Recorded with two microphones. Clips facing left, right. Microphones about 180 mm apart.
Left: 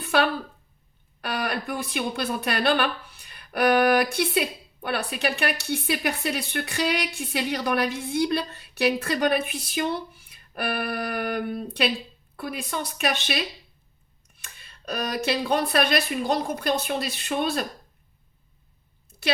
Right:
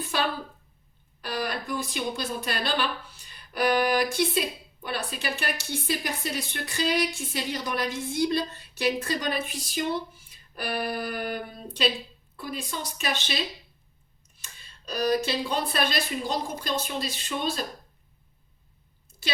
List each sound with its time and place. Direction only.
1.2 s speech: 65° left (ahead or behind)